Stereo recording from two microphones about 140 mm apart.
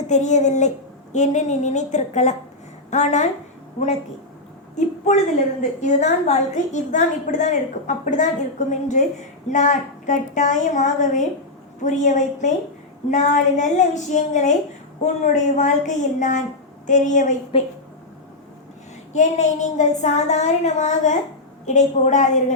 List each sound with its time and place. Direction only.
0.1 s a woman's voice: 60° left (ahead or behind)
4.7 s a sound: 55° left (ahead or behind)
5.8 s a woman's voice: 60° left (ahead or behind)
17.5 s a woman's voice: 40° left (ahead or behind)
19.1 s a woman's voice: 60° left (ahead or behind)